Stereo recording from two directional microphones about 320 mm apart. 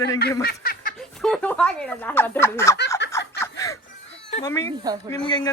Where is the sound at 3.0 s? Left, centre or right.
Left.